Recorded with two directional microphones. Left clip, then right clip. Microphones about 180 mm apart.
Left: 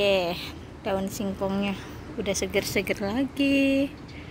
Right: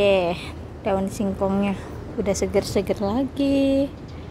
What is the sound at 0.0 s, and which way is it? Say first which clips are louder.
A woman's voice: right 4 dB; 10° right (ahead or behind).